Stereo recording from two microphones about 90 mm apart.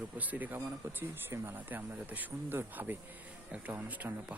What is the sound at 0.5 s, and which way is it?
Speech, 30° right (ahead or behind).